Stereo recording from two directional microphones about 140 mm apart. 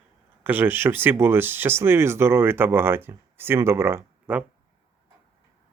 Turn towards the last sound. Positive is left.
turn(degrees=-15)  # may be behind; listen again after turning